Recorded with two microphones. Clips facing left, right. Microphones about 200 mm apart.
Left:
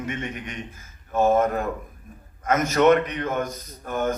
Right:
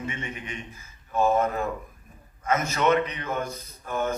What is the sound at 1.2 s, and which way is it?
A man's voice, 45° left (ahead or behind).